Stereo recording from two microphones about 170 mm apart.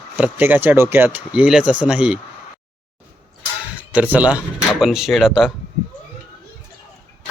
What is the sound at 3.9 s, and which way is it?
Speech, 10° right (ahead or behind).